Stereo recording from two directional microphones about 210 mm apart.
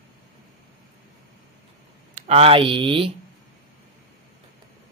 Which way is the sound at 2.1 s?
30° right (ahead or behind).